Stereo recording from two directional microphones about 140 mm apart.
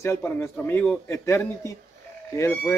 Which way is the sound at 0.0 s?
20° left (ahead or behind).